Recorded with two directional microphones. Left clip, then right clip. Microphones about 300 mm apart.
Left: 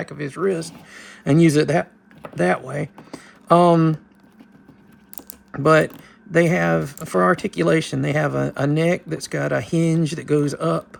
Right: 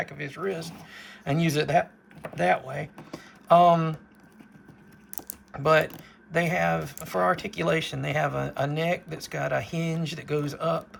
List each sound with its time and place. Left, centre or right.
0.0 s speech: centre
5.1 s typing: centre
6.3 s speech: centre